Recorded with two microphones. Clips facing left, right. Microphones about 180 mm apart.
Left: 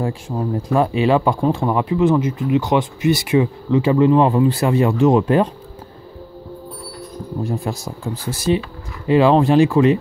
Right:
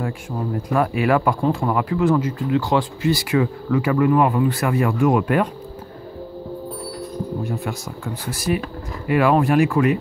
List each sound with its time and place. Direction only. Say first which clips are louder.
0.6 s speech: left 3 dB; 25° left (ahead or behind)
7.4 s speech: left 3 dB; 30° left (ahead or behind)